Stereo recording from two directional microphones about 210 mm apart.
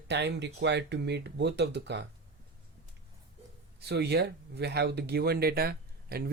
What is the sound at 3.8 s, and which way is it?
Speech, 50° right (ahead or behind).